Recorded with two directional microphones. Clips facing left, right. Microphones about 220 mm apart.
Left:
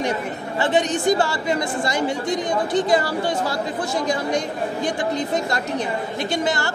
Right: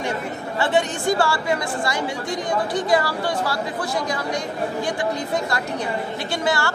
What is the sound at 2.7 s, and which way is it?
Speech, 20° left (ahead or behind).